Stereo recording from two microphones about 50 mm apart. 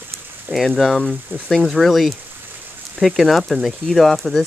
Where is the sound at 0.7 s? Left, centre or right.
Centre.